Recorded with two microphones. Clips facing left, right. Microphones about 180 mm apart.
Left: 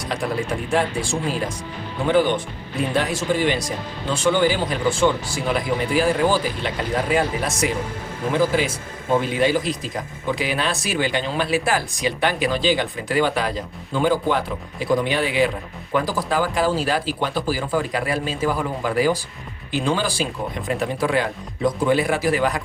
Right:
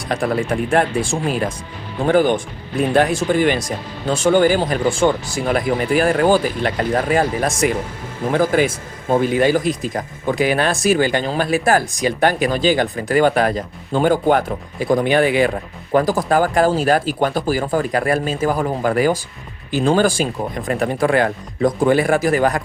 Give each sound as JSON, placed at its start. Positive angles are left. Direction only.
{"t": 0.1, "sound": "speech", "side_deg": -50}
{"t": 2.0, "sound": "speech", "side_deg": -45}